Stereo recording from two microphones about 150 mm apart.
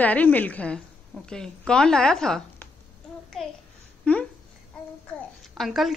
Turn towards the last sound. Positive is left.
turn(degrees=0)  # may be behind; listen again after turning